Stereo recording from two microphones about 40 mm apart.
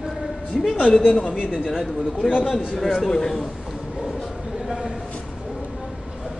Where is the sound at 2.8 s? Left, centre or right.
Centre.